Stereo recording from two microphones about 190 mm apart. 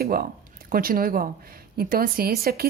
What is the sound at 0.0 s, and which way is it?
Speech, 50° right (ahead or behind).